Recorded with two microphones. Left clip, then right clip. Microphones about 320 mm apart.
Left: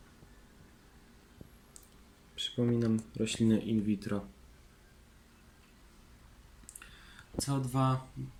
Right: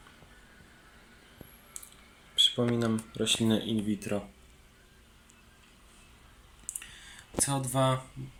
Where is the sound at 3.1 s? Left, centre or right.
Centre.